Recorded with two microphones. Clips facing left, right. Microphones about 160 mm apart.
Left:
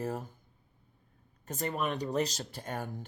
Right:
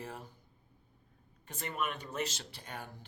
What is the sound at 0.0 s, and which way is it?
Speech, 45° left (ahead or behind).